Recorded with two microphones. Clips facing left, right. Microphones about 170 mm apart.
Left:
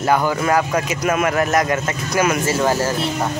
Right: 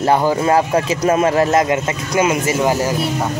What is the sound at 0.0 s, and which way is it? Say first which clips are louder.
Speech: right 3 dB; 30° right (ahead or behind).